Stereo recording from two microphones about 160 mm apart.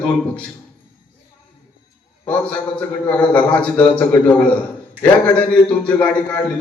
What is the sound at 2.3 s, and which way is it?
A man's voice, 10° left (ahead or behind).